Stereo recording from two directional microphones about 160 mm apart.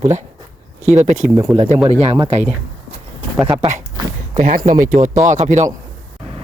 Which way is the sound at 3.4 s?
30° right (ahead or behind).